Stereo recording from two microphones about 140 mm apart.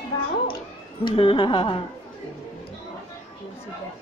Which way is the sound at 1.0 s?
40° left (ahead or behind).